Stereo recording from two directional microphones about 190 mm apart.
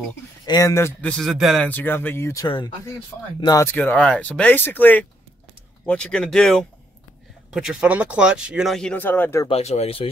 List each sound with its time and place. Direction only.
0.5 s speech: 15° left (ahead or behind)
9.5 s speech: 35° left (ahead or behind)